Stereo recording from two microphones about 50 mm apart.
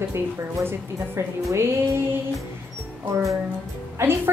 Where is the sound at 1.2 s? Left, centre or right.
Right.